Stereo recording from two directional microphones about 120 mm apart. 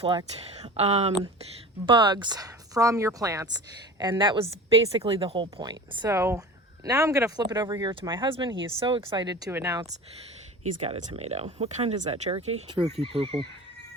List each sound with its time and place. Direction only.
0.5 s speech: 60° right (ahead or behind)
1.9 s a woman's voice: 40° right (ahead or behind)
6.1 s speech: 25° right (ahead or behind)
9.5 s speech: 20° right (ahead or behind)
10.8 s speech: 70° right (ahead or behind)
13.0 s a woman's voice: 55° right (ahead or behind)